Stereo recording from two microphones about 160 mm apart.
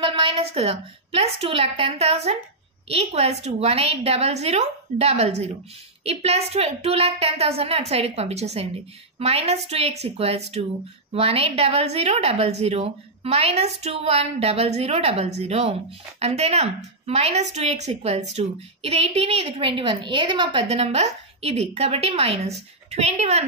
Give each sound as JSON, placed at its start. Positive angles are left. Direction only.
{"t": 0.0, "sound": "a woman's voice", "side_deg": -35}